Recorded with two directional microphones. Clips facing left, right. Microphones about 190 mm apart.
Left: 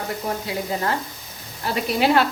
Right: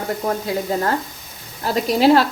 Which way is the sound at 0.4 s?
45° right (ahead or behind).